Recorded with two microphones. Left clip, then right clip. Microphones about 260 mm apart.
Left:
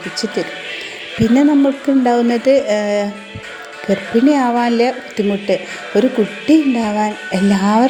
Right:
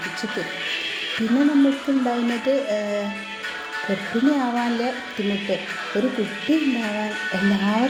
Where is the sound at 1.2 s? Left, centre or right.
Left.